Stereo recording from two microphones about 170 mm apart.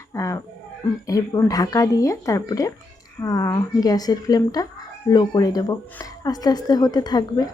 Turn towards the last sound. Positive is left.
turn(degrees=25)  # may be behind; listen again after turning